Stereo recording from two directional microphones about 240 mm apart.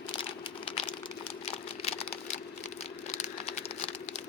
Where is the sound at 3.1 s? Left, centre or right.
Left.